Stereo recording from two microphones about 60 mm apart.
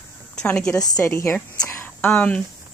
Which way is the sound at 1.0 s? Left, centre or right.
Left.